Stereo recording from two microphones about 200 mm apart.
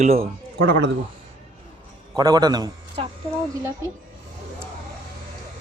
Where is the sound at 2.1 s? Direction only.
20° right (ahead or behind).